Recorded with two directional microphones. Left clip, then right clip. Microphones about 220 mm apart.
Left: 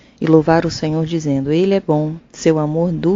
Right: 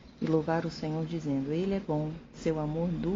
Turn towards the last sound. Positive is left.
turn(degrees=45)  # may be behind; listen again after turning